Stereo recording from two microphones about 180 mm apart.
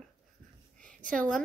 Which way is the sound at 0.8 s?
5° left (ahead or behind).